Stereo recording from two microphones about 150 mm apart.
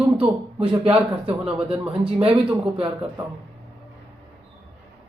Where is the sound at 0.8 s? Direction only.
40° right (ahead or behind).